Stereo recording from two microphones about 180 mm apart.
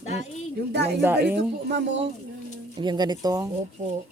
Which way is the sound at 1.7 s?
75° right (ahead or behind).